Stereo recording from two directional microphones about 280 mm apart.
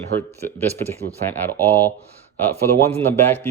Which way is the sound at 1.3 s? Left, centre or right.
Centre.